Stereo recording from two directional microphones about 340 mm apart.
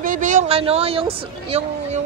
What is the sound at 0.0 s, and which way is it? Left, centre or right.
Speech, right.